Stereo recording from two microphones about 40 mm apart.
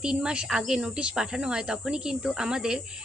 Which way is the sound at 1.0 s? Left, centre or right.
Right.